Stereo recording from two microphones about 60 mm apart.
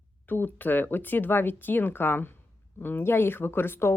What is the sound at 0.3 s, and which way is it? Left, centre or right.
Speech, left.